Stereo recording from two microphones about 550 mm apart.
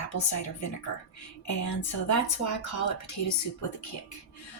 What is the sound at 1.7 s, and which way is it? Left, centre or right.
Speech, left.